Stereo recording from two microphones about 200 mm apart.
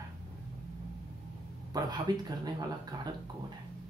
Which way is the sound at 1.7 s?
20° right (ahead or behind).